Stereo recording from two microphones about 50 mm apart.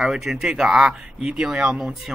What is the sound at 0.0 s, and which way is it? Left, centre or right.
Speech, centre.